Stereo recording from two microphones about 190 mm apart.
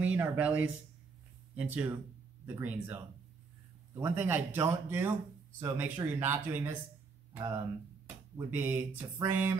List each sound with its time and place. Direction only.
0.0 s speech: 5° right (ahead or behind)